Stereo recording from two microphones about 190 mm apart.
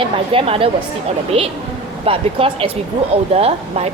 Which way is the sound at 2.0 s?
30° right (ahead or behind).